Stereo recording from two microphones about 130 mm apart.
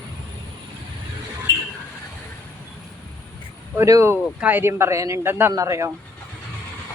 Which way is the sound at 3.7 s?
25° right (ahead or behind).